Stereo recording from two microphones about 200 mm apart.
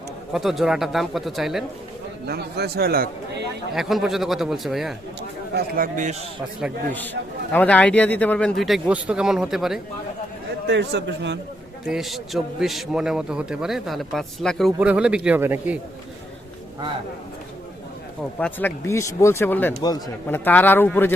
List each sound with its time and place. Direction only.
0.3 s a man's voice: centre (ahead or behind)
2.2 s a man's voice: 50° right (ahead or behind)
3.8 s a man's voice: centre (ahead or behind)
5.5 s a man's voice: 45° right (ahead or behind)
7.5 s a man's voice: 5° left (ahead or behind)
10.7 s a man's voice: 60° right (ahead or behind)
11.9 s a man's voice: centre (ahead or behind)
18.3 s speech: 10° left (ahead or behind)